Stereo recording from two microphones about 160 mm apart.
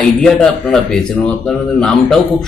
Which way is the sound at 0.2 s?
5° left (ahead or behind).